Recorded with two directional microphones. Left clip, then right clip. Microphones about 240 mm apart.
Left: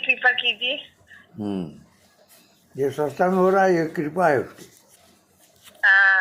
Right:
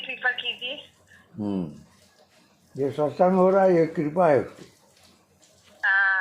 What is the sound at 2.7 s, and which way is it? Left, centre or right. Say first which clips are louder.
Speech: left 1 dB; centre.